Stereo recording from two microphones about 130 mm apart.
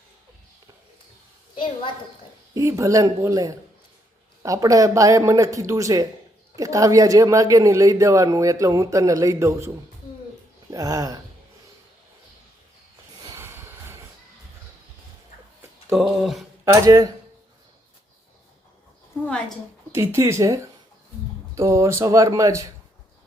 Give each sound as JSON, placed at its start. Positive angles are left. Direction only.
{"t": 2.6, "sound": "a woman's voice", "side_deg": -25}
{"t": 13.2, "sound": "vehicle", "side_deg": -20}
{"t": 15.9, "sound": "a sound", "side_deg": 0}
{"t": 16.6, "sound": "a woman's voice", "side_deg": -25}
{"t": 19.2, "sound": "a woman's voice", "side_deg": 5}
{"t": 19.9, "sound": "a woman's voice", "side_deg": -20}